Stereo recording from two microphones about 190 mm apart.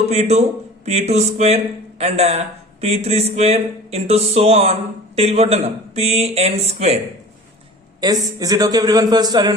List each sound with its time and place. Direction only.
0.1 s speech: 35° right (ahead or behind)
8.0 s a man's voice: 20° right (ahead or behind)